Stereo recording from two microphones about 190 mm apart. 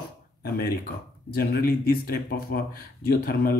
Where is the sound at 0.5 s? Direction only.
55° left (ahead or behind).